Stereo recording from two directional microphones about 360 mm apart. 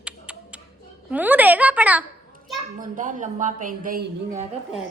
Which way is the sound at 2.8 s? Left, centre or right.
Right.